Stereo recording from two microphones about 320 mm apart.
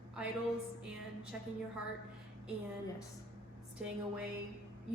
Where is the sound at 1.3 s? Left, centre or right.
Centre.